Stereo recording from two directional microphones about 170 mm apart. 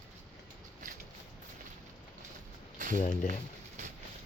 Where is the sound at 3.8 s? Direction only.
45° right (ahead or behind).